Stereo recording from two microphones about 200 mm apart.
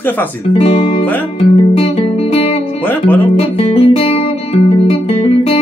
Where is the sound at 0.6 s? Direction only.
30° left (ahead or behind).